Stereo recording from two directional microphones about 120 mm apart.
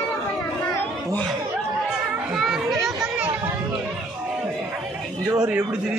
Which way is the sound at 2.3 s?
5° right (ahead or behind).